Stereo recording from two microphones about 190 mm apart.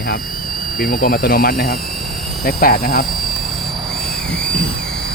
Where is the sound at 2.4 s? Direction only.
50° left (ahead or behind).